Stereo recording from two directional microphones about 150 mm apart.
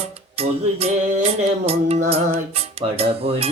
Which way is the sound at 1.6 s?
40° right (ahead or behind).